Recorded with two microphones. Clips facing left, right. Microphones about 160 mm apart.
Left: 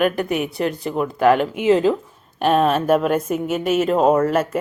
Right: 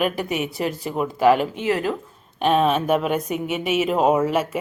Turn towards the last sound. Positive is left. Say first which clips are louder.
# left 3 dB
turn(degrees=0)  # may be behind; listen again after turning